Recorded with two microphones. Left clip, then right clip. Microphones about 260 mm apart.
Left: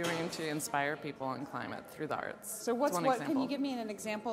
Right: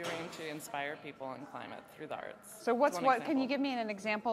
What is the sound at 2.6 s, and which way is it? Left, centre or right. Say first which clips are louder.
Speech: right 2 dB; right.